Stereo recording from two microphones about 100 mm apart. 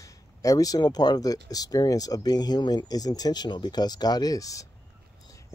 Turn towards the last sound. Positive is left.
turn(degrees=35)  # may be behind; listen again after turning